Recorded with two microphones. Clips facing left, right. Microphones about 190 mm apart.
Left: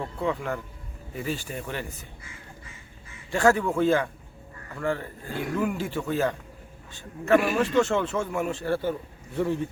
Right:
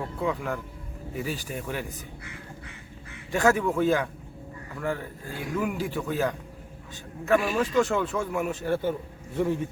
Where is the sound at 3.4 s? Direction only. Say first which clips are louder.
Left 1 dB; centre (ahead or behind).